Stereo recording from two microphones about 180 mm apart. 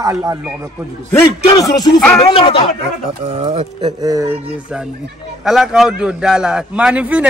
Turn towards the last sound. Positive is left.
turn(degrees=-5)  # may be behind; listen again after turning